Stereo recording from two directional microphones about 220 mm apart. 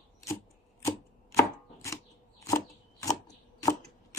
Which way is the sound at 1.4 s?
15° left (ahead or behind).